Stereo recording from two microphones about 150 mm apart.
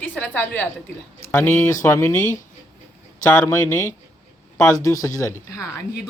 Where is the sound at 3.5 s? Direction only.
15° left (ahead or behind).